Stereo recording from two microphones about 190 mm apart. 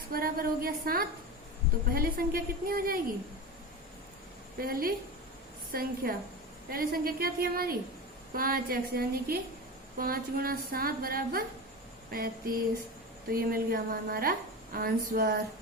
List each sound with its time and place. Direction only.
0.1 s a woman's voice: 50° right (ahead or behind)
4.5 s a woman's voice: 50° right (ahead or behind)